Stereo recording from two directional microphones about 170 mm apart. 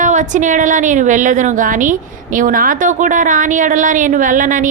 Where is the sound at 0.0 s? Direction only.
45° right (ahead or behind).